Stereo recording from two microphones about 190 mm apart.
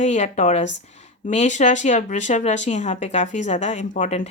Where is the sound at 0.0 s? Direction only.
40° left (ahead or behind).